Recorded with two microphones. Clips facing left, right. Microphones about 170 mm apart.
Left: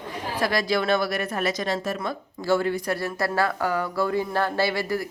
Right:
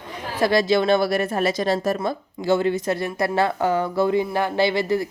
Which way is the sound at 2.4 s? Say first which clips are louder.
Right 3 dB; 20° right (ahead or behind).